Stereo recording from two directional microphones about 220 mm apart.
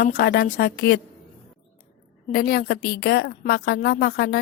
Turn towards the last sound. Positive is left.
turn(degrees=45)  # may be behind; listen again after turning